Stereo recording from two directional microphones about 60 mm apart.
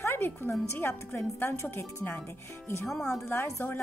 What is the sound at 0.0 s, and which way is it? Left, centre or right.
A woman's voice, left.